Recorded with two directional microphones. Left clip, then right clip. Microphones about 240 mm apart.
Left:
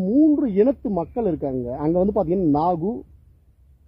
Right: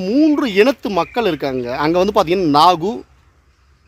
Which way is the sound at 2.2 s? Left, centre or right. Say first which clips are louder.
Right 9 dB; right.